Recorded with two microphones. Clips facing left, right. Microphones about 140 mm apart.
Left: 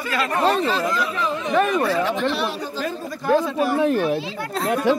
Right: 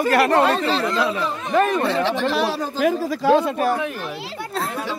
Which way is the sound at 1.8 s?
25° right (ahead or behind).